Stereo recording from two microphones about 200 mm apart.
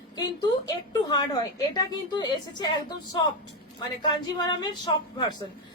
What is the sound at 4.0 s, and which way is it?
Speech, 20° left (ahead or behind).